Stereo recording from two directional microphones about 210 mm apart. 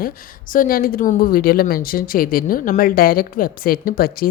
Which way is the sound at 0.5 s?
40° left (ahead or behind).